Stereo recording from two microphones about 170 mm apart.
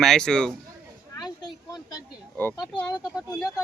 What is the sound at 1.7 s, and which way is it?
Speech, 25° left (ahead or behind).